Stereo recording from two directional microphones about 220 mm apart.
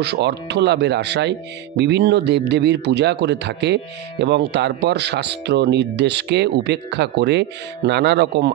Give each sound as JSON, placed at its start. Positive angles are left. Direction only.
{"t": 0.0, "sound": "speech", "side_deg": -50}